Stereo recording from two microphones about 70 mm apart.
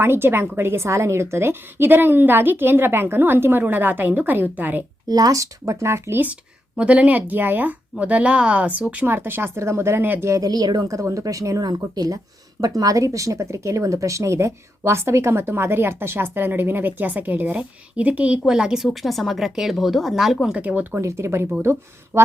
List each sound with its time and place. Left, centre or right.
0.0 s speech: right
5.0 s speech: right
6.7 s speech: centre; by 10.1 s right
10.4 s speech: right; by 18.3 s centre
18.4 s a woman's voice: centre
18.9 s speech: centre
20.6 s speech: centre
20.9 s speech: right